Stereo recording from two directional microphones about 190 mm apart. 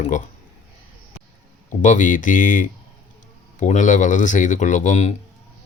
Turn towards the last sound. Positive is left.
turn(degrees=35)  # may be behind; listen again after turning